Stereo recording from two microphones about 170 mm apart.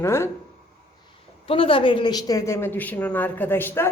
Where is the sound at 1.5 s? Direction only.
30° left (ahead or behind).